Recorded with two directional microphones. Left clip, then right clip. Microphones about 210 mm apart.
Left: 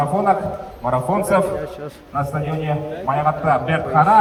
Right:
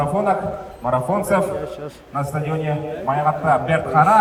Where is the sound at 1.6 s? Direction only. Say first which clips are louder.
Even; 15° right (ahead or behind).